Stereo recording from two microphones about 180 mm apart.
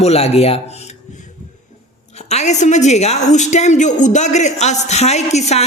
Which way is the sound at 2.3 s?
40° left (ahead or behind).